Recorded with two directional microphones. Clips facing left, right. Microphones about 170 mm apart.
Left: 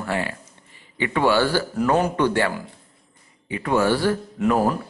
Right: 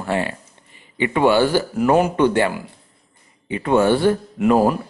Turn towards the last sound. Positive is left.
turn(degrees=-20)  # may be behind; listen again after turning